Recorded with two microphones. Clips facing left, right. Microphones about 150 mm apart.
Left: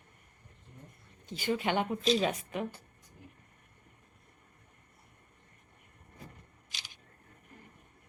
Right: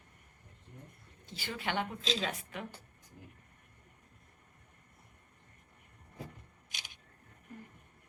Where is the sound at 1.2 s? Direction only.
15° left (ahead or behind).